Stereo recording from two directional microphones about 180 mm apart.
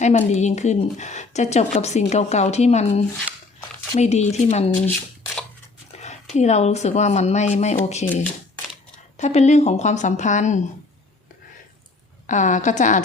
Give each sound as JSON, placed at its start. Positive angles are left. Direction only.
{"t": 0.0, "sound": "a woman's voice", "side_deg": 40}
{"t": 4.9, "sound": "shuffling cards", "side_deg": 5}
{"t": 6.0, "sound": "a woman's voice", "side_deg": 40}
{"t": 8.0, "sound": "speech", "side_deg": 10}
{"t": 9.1, "sound": "a woman's voice", "side_deg": 40}
{"t": 12.3, "sound": "a woman's voice", "side_deg": 40}